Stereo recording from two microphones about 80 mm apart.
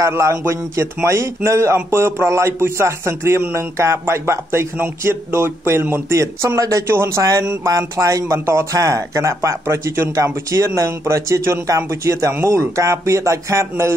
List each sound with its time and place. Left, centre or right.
0.0 s a man's voice: right